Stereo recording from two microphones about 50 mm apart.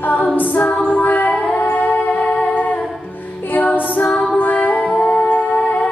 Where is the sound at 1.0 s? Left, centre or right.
Left.